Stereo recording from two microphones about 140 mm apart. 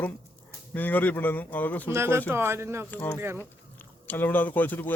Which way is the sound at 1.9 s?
20° right (ahead or behind).